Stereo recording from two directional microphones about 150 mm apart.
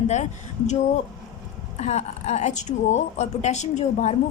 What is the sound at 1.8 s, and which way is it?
A woman's voice, 45° left (ahead or behind).